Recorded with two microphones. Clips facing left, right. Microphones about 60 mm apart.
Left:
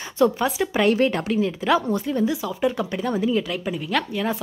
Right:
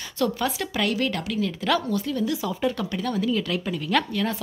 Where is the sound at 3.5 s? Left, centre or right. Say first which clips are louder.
Even; centre.